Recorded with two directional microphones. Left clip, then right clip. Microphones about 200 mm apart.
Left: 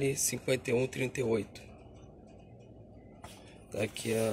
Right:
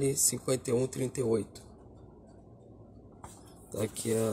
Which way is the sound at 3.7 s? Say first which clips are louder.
Right 1 dB; 30° right (ahead or behind).